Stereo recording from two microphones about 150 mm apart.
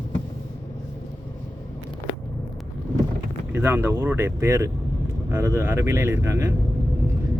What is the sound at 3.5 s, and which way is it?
Speech, 15° right (ahead or behind).